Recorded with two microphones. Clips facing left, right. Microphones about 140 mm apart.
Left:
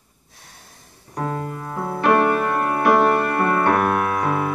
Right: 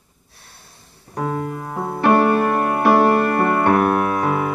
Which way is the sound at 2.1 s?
30° right (ahead or behind).